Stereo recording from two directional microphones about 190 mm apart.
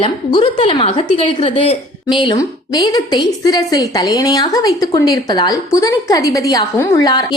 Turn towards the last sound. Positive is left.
turn(degrees=20)  # may be behind; listen again after turning